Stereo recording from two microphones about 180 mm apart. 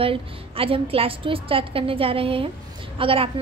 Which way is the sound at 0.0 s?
30° right (ahead or behind).